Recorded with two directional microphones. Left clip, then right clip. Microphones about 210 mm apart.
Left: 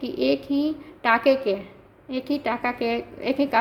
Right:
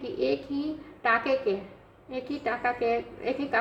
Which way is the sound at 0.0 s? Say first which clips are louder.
Left 5 dB; 50° left (ahead or behind).